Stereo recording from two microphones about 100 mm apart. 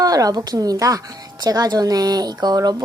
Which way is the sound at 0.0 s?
40° right (ahead or behind).